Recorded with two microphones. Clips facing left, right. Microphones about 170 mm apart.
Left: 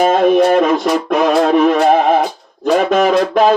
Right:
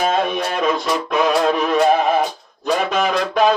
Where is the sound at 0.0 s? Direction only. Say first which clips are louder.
Left 9 dB; 55° left (ahead or behind).